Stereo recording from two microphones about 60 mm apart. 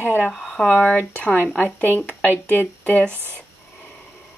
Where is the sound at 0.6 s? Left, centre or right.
Centre.